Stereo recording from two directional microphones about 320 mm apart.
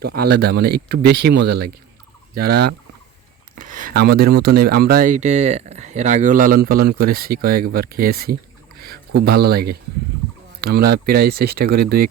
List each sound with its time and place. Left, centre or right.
0.0 s speech: right